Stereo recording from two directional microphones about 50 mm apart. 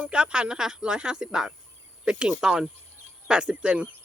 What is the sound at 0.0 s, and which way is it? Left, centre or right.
Speech, right.